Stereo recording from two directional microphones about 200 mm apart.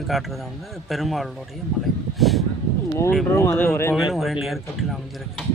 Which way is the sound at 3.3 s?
15° left (ahead or behind).